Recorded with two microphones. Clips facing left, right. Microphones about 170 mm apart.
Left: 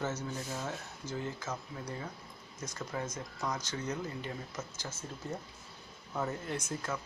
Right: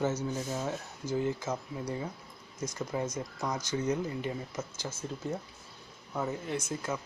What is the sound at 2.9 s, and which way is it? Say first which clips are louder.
Speech: right 3 dB; 15° right (ahead or behind).